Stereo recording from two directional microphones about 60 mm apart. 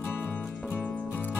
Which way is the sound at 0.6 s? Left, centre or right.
Left.